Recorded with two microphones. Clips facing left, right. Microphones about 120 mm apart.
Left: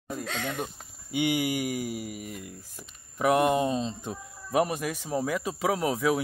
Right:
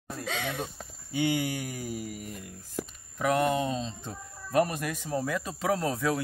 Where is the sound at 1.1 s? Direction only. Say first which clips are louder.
Left 2 dB; 15° left (ahead or behind).